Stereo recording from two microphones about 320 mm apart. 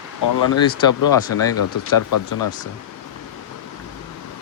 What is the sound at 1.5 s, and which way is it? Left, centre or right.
Speech, left.